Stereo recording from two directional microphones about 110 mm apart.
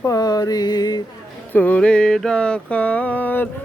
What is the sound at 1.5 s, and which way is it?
Mantra, 15° left (ahead or behind).